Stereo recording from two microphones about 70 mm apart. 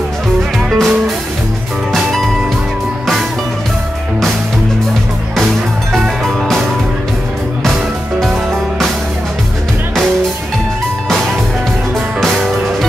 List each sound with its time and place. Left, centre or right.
0.7 s music: centre
5.9 s music: centre
7.6 s music: centre